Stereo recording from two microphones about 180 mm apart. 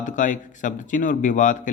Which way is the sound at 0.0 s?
45° left (ahead or behind).